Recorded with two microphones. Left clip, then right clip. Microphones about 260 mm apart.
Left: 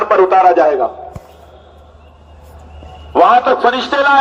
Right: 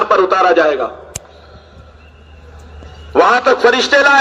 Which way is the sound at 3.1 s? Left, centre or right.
Right.